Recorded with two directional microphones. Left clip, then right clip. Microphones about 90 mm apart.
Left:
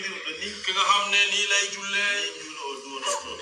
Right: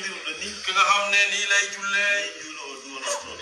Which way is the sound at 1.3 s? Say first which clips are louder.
Right 1 dB; 10° left (ahead or behind).